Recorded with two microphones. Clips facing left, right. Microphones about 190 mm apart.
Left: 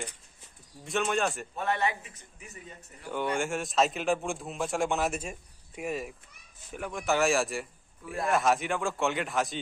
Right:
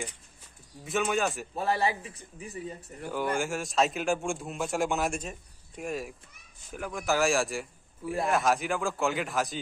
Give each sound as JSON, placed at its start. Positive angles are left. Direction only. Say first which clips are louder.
{"t": 0.8, "sound": "a man's voice", "louder": "right 1 dB", "side_deg": 0}
{"t": 1.5, "sound": "a man's voice", "louder": "right 2 dB", "side_deg": -35}
{"t": 3.1, "sound": "a man's voice", "louder": "even", "side_deg": 0}